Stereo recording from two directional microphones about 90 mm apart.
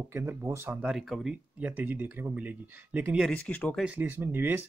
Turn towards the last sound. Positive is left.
turn(degrees=-20)  # may be behind; listen again after turning